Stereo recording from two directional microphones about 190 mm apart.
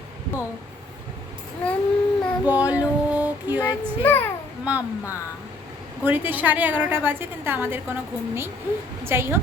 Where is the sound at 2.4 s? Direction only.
10° right (ahead or behind).